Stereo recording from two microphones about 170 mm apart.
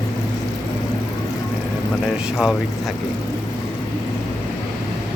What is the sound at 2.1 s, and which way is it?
Speech, 5° right (ahead or behind).